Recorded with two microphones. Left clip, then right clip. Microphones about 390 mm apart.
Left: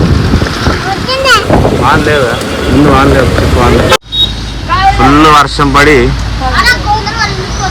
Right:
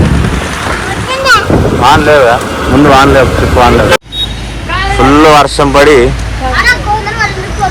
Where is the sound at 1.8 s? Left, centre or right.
Centre.